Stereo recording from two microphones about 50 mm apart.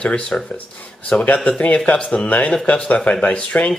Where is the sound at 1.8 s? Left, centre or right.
Centre.